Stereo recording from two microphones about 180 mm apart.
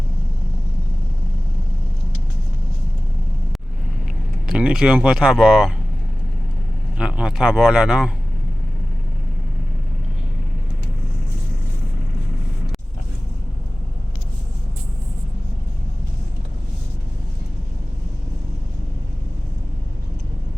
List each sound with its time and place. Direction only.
4.5 s speech: 5° right (ahead or behind)
7.0 s speech: 5° right (ahead or behind)